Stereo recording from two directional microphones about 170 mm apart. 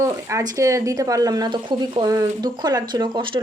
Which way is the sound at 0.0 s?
20° right (ahead or behind).